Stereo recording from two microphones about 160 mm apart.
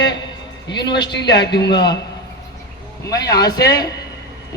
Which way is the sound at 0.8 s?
30° left (ahead or behind).